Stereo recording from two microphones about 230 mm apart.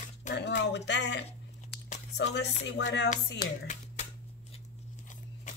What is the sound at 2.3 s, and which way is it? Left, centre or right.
Speech, left.